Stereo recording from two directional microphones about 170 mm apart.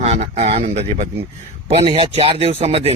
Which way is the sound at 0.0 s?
40° right (ahead or behind).